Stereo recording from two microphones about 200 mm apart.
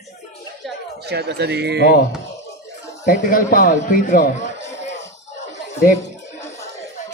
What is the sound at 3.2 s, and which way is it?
A man's voice, 45° left (ahead or behind).